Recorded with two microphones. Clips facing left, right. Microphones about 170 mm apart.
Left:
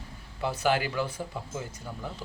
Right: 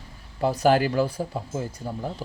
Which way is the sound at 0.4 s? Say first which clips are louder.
Right 7 dB; 40° right (ahead or behind).